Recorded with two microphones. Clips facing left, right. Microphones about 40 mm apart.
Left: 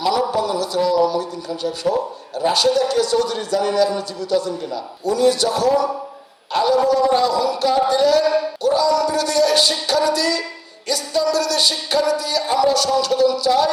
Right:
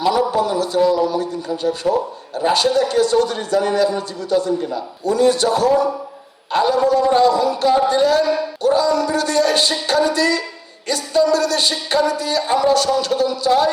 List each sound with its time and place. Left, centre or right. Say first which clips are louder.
0.0 s a man's voice: right 2 dB; right